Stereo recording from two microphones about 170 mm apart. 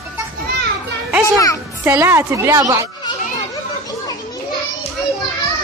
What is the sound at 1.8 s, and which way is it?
Speech, 15° right (ahead or behind).